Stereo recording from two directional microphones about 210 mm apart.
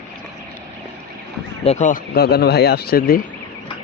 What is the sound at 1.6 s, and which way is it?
Speech, 35° left (ahead or behind).